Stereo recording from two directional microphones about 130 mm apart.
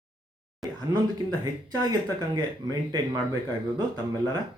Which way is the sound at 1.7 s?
30° right (ahead or behind).